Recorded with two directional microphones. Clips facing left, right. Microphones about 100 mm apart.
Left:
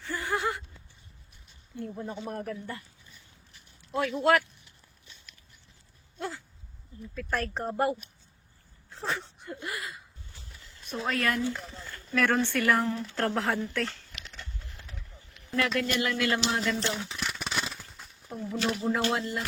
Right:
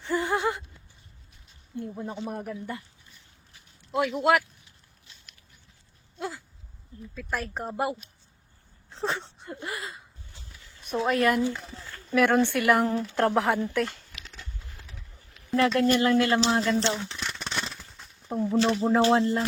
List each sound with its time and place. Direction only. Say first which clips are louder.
0.0 s a sound: right 5 dB; 20° right (ahead or behind)
1.7 s speech: right 3 dB; 25° right (ahead or behind)
2.2 s speech: right 2 dB; 10° right (ahead or behind)
3.9 s speech: right 1 dB; 15° right (ahead or behind)
6.1 s a sound: right 2 dB; 5° right (ahead or behind)
7.1 s speech: left 1 dB; 5° right (ahead or behind)
8.9 s a sound: right 3 dB; 25° right (ahead or behind)
11.0 s speech: right 6 dB; 25° right (ahead or behind)
12.1 s speech: right 4 dB; 15° right (ahead or behind)
15.5 s speech: right 6 dB; 35° right (ahead or behind)
16.9 s a sound: right 2 dB; centre (ahead or behind)
18.5 s speech: right 6 dB; 30° right (ahead or behind)